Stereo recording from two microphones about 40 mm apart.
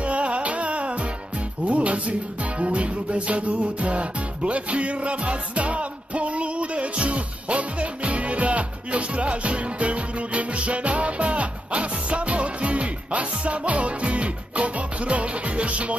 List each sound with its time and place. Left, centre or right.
0.0 s music: right